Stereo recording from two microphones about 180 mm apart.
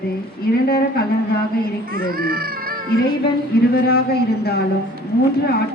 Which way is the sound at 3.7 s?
60° left (ahead or behind).